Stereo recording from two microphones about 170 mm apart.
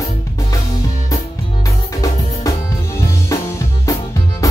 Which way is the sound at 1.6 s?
20° left (ahead or behind).